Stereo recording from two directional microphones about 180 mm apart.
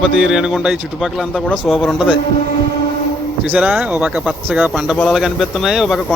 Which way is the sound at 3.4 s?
5° right (ahead or behind).